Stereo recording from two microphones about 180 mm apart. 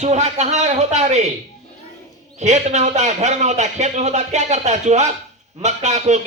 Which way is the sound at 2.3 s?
40° right (ahead or behind).